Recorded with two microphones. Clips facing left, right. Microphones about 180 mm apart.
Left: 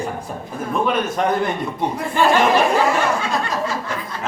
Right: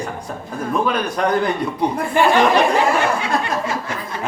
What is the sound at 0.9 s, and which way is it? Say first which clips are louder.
Speech: left 1 dB; centre (ahead or behind).